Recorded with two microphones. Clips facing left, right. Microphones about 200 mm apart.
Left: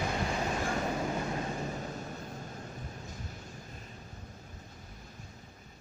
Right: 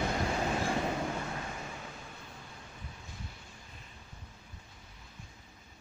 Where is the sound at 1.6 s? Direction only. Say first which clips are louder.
Left 7 dB; 40° left (ahead or behind).